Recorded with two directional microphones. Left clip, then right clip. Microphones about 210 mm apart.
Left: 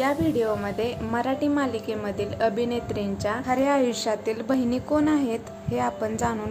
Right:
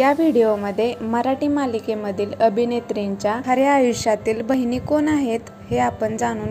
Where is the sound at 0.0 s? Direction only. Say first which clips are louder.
Right 8 dB; 25° right (ahead or behind).